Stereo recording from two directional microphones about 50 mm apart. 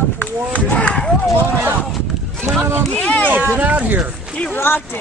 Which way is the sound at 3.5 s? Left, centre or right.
Right.